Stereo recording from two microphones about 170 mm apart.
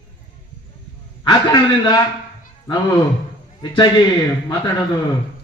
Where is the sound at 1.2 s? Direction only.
25° left (ahead or behind).